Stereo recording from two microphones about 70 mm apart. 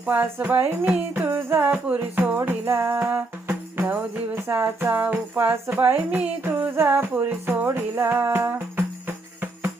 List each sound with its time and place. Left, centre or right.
0.1 s music: right
2.6 s music: right